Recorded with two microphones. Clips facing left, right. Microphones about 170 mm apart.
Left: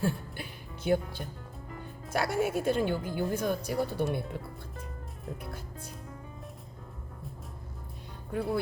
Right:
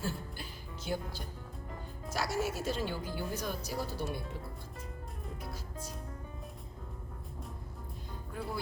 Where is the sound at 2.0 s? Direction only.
60° left (ahead or behind).